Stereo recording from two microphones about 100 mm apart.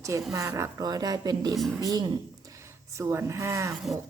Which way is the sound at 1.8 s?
40° right (ahead or behind).